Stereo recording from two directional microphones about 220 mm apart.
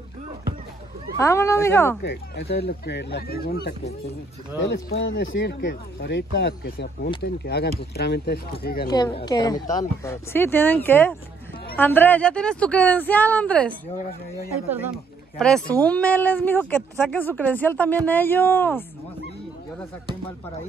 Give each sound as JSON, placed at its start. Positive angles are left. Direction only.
{"t": 1.1, "sound": "speech", "side_deg": 15}
{"t": 2.0, "sound": "speech", "side_deg": 50}
{"t": 8.8, "sound": "speech", "side_deg": 20}
{"t": 15.3, "sound": "speech", "side_deg": 5}